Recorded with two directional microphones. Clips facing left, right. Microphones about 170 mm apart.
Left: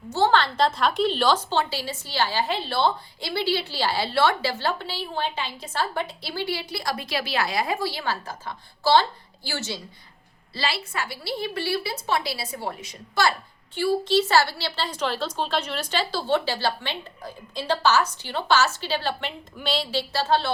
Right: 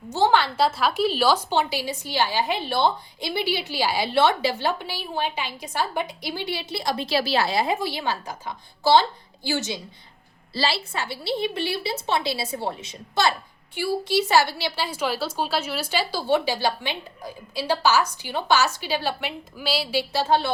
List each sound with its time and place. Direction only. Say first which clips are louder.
0.1 s a woman's voice: right 1 dB; 15° right (ahead or behind)
10.5 s a woman's voice: right 3 dB; 30° right (ahead or behind)
13.7 s a woman's voice: left 2 dB; 10° right (ahead or behind)